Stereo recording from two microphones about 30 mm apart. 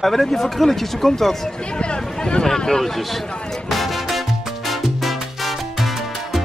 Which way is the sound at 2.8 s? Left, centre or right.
Centre.